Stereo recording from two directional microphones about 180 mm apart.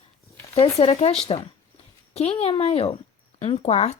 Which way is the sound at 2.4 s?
35° left (ahead or behind).